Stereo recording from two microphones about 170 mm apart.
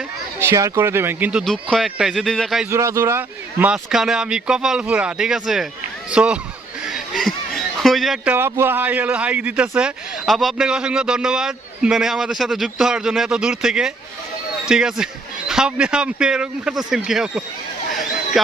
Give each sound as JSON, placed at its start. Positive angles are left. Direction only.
{"t": 0.3, "sound": "speech", "side_deg": -15}
{"t": 2.6, "sound": "a man's voice", "side_deg": -15}